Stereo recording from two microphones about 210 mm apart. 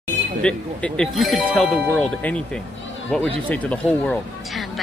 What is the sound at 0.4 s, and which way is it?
Speech, 5° left (ahead or behind).